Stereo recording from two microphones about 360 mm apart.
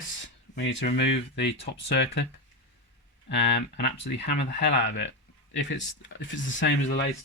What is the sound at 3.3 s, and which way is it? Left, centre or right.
Speech, left.